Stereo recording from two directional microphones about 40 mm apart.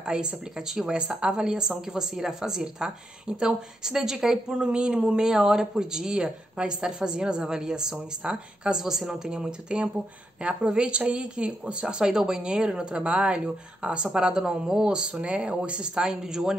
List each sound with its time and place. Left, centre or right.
0.0 s speech: right
8.2 s speech: right
8.7 s speech: centre; by 13.4 s right
14.0 s speech: centre
15.9 s speech: centre